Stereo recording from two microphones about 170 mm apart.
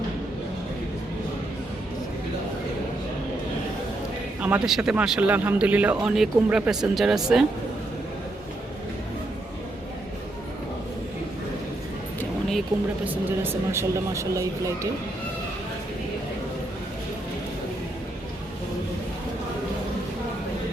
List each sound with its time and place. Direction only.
4.4 s a man's voice: 10° right (ahead or behind)
12.7 s speech: 20° right (ahead or behind)